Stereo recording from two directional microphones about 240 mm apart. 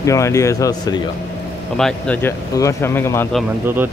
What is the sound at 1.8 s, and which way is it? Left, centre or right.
Speech, centre.